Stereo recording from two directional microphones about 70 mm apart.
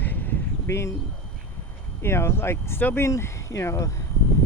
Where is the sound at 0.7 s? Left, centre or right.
Left.